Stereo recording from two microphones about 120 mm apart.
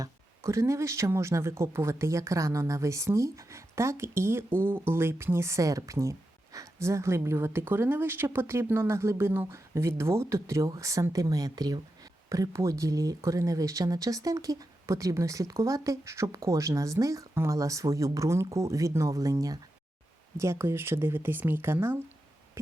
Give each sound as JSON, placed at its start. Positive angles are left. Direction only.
{"t": 0.0, "sound": "speech", "side_deg": -25}